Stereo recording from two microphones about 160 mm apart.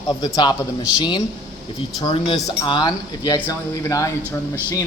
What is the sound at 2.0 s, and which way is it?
Speech, 25° left (ahead or behind).